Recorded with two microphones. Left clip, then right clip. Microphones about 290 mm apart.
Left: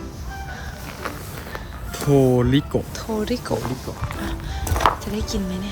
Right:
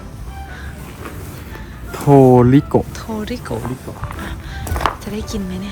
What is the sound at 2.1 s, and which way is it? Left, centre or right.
Speech, right.